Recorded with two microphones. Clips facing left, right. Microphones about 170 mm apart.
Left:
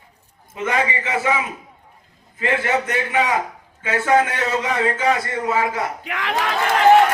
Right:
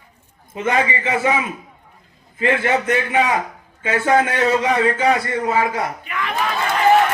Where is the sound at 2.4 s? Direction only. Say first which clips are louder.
Right 2 dB; 25° right (ahead or behind).